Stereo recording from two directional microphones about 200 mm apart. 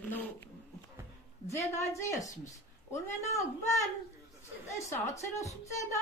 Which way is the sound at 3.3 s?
15° left (ahead or behind).